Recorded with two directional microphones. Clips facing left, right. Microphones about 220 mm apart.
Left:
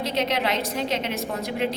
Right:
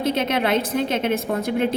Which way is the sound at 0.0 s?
50° right (ahead or behind).